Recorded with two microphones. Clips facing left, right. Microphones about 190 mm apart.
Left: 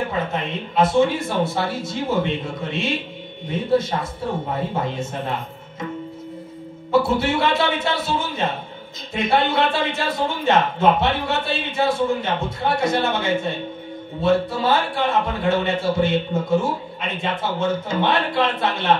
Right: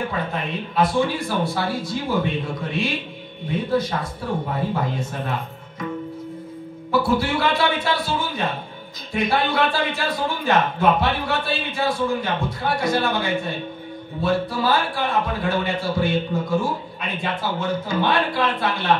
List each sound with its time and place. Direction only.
0.3 s a man's voice: 25° left (ahead or behind)
6.9 s a man's voice: 25° left (ahead or behind)